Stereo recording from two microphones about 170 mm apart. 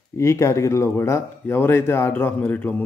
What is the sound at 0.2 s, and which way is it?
Speech, 15° left (ahead or behind).